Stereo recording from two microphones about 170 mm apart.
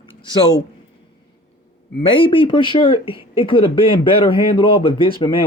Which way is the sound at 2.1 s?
30° left (ahead or behind).